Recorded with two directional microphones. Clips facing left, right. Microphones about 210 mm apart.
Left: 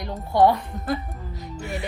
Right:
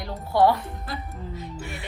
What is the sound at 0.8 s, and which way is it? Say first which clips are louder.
Speech: left 7 dB; 45° left (ahead or behind).